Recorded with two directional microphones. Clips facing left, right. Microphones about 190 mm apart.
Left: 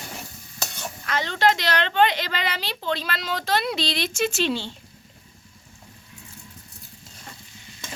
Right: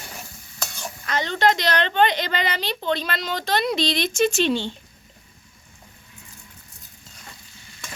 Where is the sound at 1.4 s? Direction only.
5° left (ahead or behind).